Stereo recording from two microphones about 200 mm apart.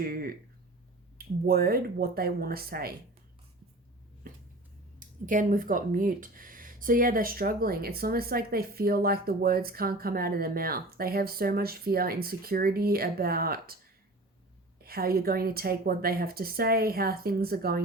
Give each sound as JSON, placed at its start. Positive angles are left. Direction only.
{"t": 0.0, "sound": "a sound", "side_deg": -50}
{"t": 1.5, "sound": "speech", "side_deg": -50}
{"t": 4.9, "sound": "speech", "side_deg": -40}
{"t": 14.8, "sound": "speech", "side_deg": -50}